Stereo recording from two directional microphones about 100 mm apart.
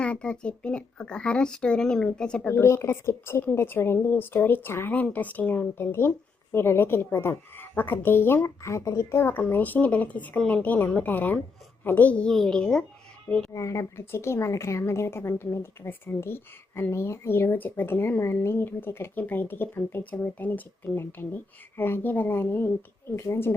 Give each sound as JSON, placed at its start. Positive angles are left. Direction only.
{"t": 0.0, "sound": "a child's voice", "side_deg": 10}
{"t": 2.5, "sound": "a child's voice", "side_deg": 25}
{"t": 13.5, "sound": "speech", "side_deg": 30}